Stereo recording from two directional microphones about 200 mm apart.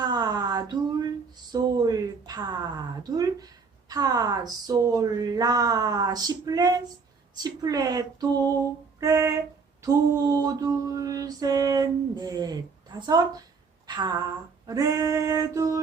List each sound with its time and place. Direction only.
0.0 s a sound: 20° right (ahead or behind)
1.5 s a woman's voice: 20° right (ahead or behind)
9.0 s female singing: 15° right (ahead or behind)
9.8 s a woman's voice: 15° right (ahead or behind)
14.7 s female singing: 15° right (ahead or behind)